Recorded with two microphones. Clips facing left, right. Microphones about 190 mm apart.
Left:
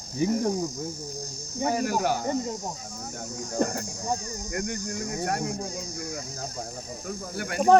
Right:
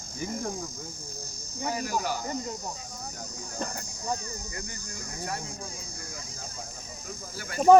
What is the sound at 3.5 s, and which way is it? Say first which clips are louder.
Speech: left 10 dB; 55° left (ahead or behind).